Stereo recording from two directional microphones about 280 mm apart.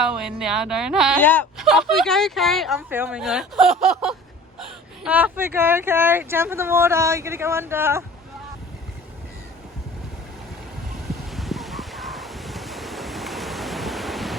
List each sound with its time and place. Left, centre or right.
0.0 s speech: centre
11.1 s waves: centre